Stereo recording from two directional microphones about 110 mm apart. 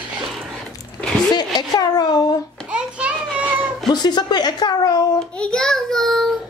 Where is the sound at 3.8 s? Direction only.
40° left (ahead or behind).